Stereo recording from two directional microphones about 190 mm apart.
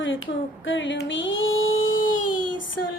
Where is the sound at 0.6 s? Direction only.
80° left.